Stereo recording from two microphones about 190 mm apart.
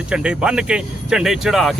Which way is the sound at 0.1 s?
5° right (ahead or behind).